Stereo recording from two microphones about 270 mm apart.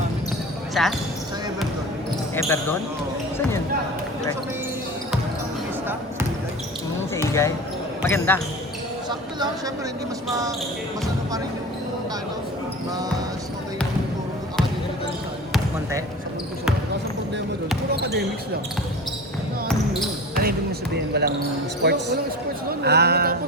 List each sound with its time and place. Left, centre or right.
0.7 s speech: centre
2.3 s speech: centre
7.1 s speech: centre
15.5 s basketball bounce: centre
17.9 s speech: right
19.6 s basketball bounce: centre
20.9 s speech: right